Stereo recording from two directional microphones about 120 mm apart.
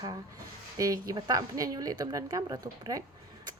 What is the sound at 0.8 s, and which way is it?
Speech, 30° right (ahead or behind).